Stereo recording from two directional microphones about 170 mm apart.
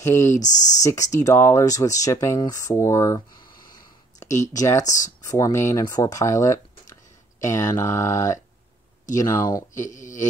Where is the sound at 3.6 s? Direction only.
25° left (ahead or behind).